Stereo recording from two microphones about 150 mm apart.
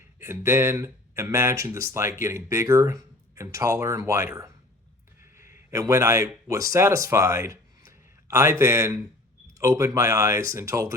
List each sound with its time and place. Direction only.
0.2 s a man's voice: 15° right (ahead or behind)